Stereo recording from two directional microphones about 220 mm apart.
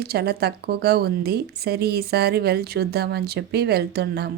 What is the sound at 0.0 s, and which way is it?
Speech, 45° right (ahead or behind).